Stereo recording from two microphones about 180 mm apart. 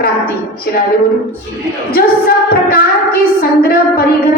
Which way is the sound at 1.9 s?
55° left (ahead or behind).